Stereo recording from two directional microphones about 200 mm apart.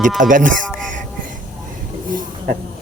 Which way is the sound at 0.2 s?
40° right (ahead or behind).